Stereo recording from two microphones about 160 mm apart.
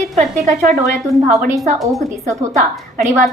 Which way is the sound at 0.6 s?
50° right (ahead or behind).